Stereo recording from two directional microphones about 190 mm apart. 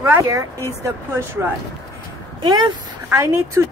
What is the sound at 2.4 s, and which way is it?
Speech, 25° right (ahead or behind).